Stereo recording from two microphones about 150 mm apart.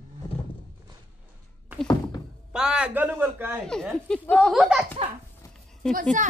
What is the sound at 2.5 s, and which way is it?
A man's voice, 5° right (ahead or behind).